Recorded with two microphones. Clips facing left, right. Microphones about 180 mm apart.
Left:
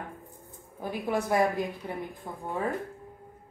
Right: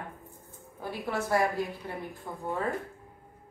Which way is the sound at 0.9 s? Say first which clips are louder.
Left 2 dB; 15° left (ahead or behind).